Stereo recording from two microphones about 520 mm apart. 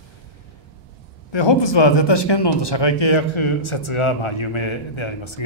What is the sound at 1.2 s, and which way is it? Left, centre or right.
A man's voice, left.